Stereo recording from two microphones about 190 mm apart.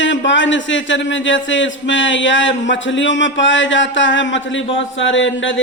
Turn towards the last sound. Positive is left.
turn(degrees=80)